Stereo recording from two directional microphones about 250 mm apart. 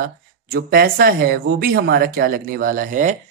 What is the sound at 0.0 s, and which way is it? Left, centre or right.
Speech, right.